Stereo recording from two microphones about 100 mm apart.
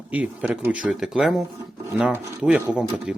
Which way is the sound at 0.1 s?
15° right (ahead or behind).